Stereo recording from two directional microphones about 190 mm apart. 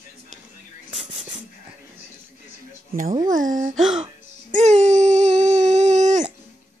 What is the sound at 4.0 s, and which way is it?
Music, 35° right (ahead or behind).